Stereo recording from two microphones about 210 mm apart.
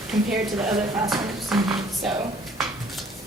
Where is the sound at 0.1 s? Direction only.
Centre (ahead or behind).